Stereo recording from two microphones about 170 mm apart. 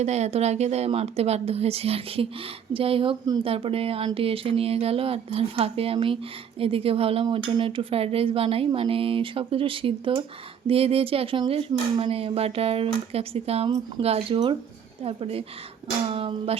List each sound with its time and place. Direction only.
0.0 s speech: 40° right (ahead or behind)